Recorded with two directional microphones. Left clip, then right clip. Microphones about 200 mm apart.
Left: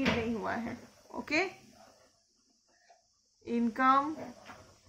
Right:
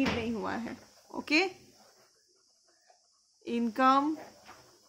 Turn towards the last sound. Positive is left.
turn(degrees=-50)  # may be behind; listen again after turning